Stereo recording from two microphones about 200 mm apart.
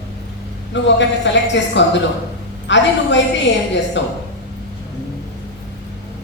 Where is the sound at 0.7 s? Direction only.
65° left (ahead or behind).